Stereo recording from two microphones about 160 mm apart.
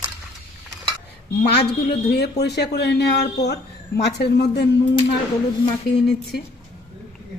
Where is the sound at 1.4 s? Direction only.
90° left.